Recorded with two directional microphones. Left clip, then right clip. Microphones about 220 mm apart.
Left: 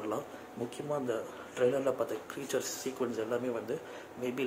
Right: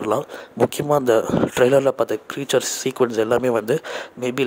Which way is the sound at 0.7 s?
45° right (ahead or behind).